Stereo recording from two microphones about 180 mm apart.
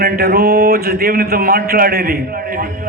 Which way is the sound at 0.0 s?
60° right (ahead or behind).